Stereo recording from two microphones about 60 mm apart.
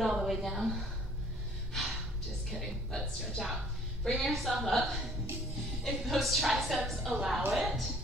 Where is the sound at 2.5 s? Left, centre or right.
Centre.